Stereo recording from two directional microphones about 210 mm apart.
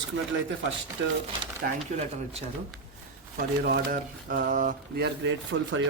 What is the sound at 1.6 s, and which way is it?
Speech, 35° right (ahead or behind).